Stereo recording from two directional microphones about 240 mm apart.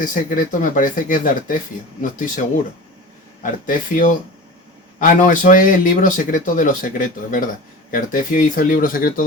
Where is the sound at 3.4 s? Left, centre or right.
Left.